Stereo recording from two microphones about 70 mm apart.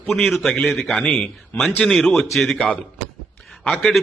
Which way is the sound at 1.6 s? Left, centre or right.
Centre.